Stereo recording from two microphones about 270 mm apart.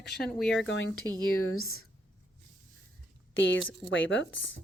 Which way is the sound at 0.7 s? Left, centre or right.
Left.